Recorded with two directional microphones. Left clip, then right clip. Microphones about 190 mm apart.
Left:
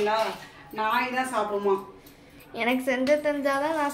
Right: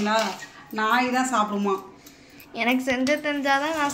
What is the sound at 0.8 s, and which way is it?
Speech, 50° right (ahead or behind).